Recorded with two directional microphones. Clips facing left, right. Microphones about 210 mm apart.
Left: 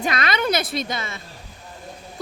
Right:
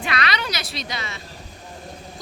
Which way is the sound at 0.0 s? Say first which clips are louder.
Left 3 dB; 45° left (ahead or behind).